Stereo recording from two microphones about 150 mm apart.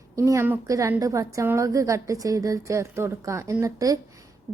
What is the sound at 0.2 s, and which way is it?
A woman's voice, 20° right (ahead or behind).